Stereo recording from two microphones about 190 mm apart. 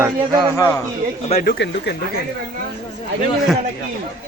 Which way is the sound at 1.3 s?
60° left (ahead or behind).